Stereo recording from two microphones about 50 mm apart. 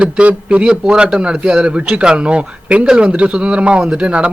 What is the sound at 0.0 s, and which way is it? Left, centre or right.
Speech, right.